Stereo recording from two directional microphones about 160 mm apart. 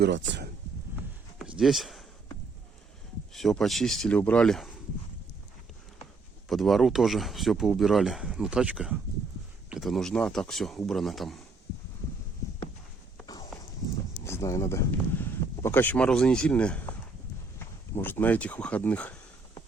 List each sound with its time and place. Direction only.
1.4 s a sound: 5° right (ahead or behind)
3.3 s speech: centre (ahead or behind)
6.5 s speech: centre (ahead or behind)
13.2 s walk: 25° left (ahead or behind)
14.3 s speech: 20° left (ahead or behind)
17.9 s speech: 10° left (ahead or behind)